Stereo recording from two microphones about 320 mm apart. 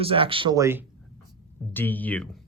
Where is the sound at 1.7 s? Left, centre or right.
Centre.